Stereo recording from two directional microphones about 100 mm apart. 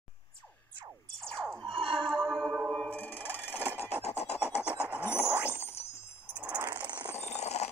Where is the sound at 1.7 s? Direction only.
60° right (ahead or behind).